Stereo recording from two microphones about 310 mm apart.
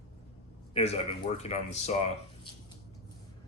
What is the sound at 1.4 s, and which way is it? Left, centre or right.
Speech, left.